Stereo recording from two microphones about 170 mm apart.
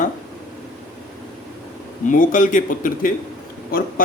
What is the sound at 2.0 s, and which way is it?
Speech, 50° left (ahead or behind).